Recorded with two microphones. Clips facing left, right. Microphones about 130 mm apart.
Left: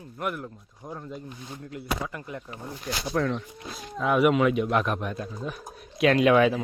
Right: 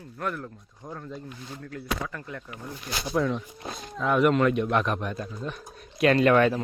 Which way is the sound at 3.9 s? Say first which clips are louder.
Even; 5° left (ahead or behind).